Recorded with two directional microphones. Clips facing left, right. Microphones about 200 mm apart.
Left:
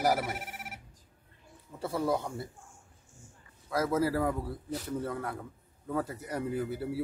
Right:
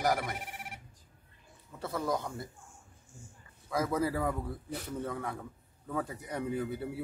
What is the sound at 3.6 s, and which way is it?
Speech, 5° left (ahead or behind).